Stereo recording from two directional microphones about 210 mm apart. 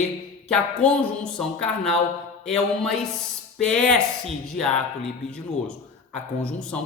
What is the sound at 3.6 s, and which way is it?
Speech, 5° left (ahead or behind).